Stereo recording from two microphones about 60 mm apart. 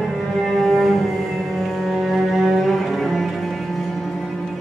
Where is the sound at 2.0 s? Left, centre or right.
Centre.